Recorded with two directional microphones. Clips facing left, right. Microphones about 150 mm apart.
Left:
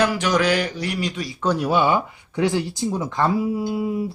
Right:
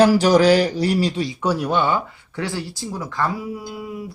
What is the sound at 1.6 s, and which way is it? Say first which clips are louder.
Speech: left 4 dB; 10° left (ahead or behind).